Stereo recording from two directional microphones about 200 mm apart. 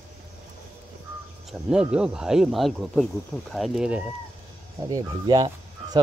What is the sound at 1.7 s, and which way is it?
Speech, 5° right (ahead or behind).